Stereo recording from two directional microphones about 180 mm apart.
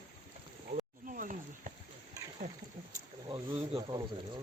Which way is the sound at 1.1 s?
50° right (ahead or behind).